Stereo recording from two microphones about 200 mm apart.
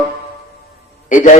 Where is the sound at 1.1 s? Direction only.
40° left (ahead or behind).